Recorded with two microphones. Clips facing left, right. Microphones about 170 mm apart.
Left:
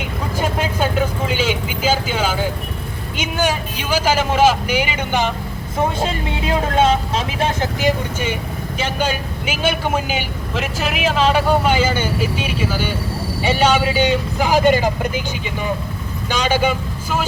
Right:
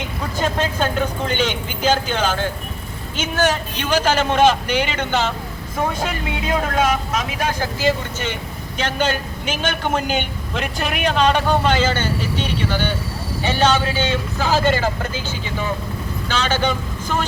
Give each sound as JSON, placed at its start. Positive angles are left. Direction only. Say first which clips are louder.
{"t": 0.0, "sound": "a man's voice", "louder": "left 1 dB", "side_deg": 10}
{"t": 6.0, "sound": "a man's voice", "louder": "left 2 dB", "side_deg": 25}
{"t": 16.3, "sound": "speech", "louder": "left 3 dB", "side_deg": 10}